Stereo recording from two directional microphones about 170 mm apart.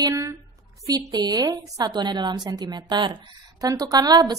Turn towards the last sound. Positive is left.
turn(degrees=-25)  # may be behind; listen again after turning